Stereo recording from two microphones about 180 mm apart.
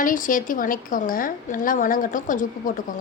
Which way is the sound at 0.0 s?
50° left (ahead or behind).